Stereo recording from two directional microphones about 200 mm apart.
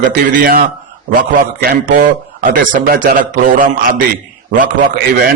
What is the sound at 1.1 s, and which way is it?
A man's voice, 45° right (ahead or behind).